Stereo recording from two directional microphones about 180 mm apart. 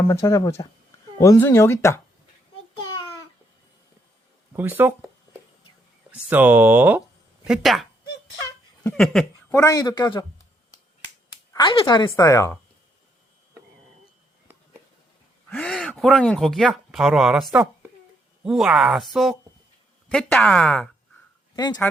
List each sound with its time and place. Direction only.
0.1 s speech: 15° left (ahead or behind)
4.5 s speech: 10° right (ahead or behind)
9.5 s a woman's voice: 20° left (ahead or behind)
11.5 s a woman's voice: 25° left (ahead or behind)
15.4 s speech: 5° left (ahead or behind)
21.5 s speech: 25° left (ahead or behind)